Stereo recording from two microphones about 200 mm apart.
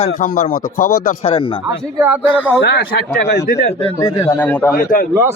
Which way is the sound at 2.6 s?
55° left (ahead or behind).